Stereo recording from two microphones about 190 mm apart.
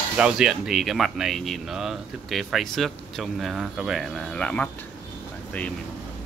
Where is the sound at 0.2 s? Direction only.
5° right (ahead or behind).